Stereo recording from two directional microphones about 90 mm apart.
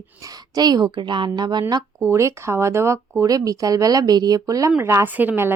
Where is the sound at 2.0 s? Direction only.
35° right (ahead or behind).